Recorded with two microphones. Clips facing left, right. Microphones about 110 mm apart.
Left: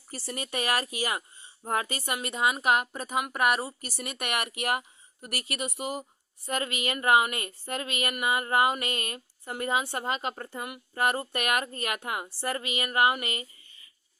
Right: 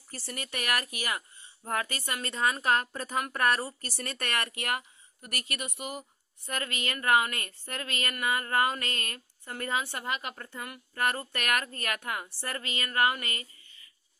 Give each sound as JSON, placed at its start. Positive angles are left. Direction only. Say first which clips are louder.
{"t": 0.3, "sound": "a woman's voice", "louder": "left 3 dB", "side_deg": 20}